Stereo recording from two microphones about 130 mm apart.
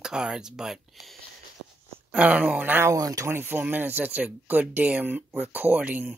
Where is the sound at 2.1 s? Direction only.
10° right (ahead or behind).